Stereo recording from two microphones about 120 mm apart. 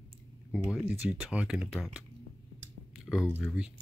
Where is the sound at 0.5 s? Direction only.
5° right (ahead or behind).